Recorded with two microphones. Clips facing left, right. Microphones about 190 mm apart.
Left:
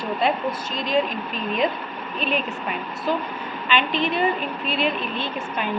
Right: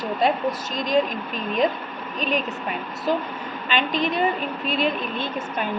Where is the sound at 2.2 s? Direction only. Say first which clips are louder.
Right 1 dB; 45° right (ahead or behind).